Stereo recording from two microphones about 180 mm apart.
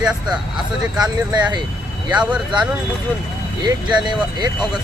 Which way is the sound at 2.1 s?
5° right (ahead or behind).